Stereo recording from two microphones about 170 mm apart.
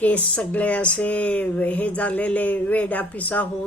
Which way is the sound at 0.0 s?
10° left (ahead or behind).